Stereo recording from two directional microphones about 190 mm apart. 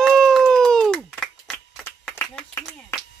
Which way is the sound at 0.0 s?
Centre (ahead or behind).